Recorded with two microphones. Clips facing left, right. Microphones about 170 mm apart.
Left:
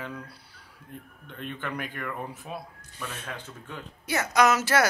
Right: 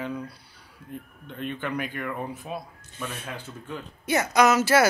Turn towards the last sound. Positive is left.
turn(degrees=-5)  # may be behind; listen again after turning